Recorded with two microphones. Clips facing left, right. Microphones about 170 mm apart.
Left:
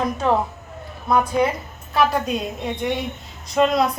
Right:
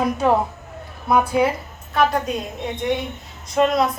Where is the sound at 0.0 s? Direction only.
10° right (ahead or behind).